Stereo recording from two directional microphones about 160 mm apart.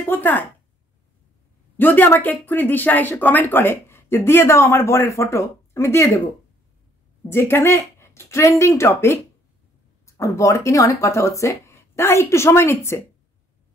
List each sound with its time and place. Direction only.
0.1 s speech: 10° left (ahead or behind)
1.8 s speech: 10° left (ahead or behind)
7.2 s speech: 15° left (ahead or behind)